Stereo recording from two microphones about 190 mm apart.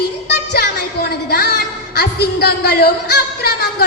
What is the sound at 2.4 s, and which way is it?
Speech, 55° left (ahead or behind).